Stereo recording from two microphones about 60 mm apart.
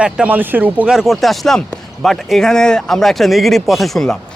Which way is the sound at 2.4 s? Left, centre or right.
Centre.